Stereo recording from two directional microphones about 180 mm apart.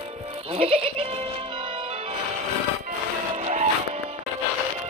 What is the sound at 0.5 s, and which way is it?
Music, 35° right (ahead or behind).